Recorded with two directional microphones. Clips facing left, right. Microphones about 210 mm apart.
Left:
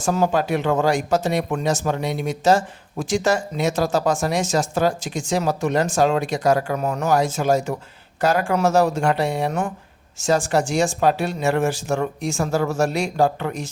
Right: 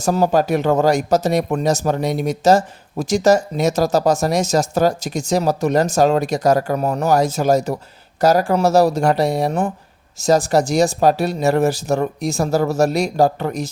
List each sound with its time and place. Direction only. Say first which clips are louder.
0.0 s speech: right 4 dB; 40° right (ahead or behind)